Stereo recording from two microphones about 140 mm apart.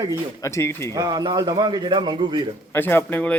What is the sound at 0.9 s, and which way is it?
A man's voice, 25° right (ahead or behind).